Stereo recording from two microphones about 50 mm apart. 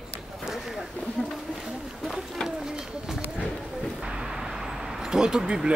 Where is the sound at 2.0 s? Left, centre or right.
Centre.